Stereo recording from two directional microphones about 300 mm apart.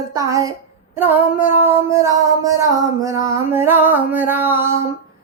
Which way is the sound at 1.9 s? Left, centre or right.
Centre.